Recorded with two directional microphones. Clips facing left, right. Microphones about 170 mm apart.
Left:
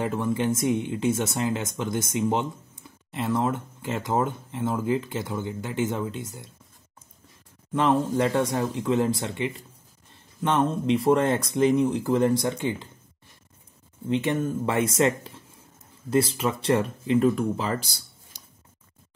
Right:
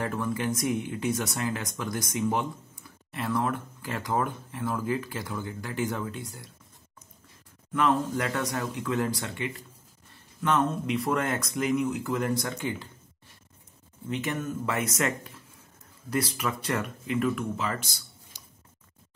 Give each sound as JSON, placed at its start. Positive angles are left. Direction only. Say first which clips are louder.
{"t": 0.0, "sound": "speech", "louder": "left 4 dB", "side_deg": 20}
{"t": 7.7, "sound": "speech", "louder": "left 3 dB", "side_deg": 25}
{"t": 14.0, "sound": "speech", "louder": "left 6 dB", "side_deg": 25}